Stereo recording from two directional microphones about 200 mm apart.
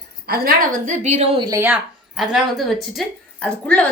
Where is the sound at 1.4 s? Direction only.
15° right (ahead or behind).